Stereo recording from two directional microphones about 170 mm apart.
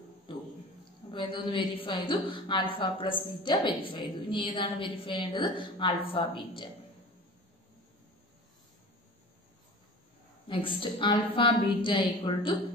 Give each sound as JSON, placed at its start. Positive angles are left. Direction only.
{"t": 1.1, "sound": "a woman's voice", "side_deg": 30}
{"t": 10.5, "sound": "a woman's voice", "side_deg": 30}